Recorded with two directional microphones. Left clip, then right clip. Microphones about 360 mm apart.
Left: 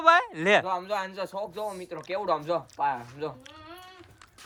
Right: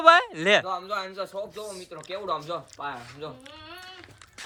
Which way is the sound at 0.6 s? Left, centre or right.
Centre.